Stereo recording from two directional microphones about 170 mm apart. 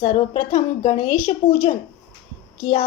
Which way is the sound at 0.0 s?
50° left (ahead or behind).